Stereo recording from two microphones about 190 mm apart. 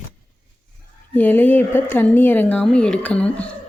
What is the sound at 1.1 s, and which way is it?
Speech, 10° left (ahead or behind).